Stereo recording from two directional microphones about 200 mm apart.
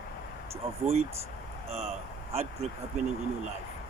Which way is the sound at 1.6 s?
30° right (ahead or behind).